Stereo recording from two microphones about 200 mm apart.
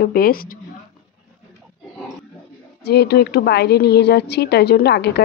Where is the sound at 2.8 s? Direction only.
55° left (ahead or behind).